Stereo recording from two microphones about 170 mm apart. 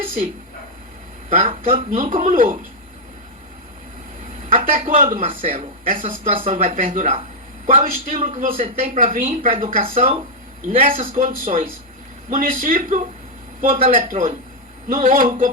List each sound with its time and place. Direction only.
1.3 s a woman's voice: 35° right (ahead or behind)
4.8 s a woman's voice: 35° right (ahead or behind)